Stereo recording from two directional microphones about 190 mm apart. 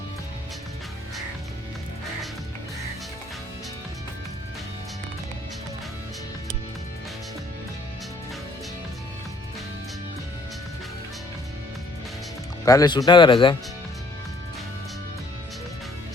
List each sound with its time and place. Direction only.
12.6 s speech: 20° left (ahead or behind)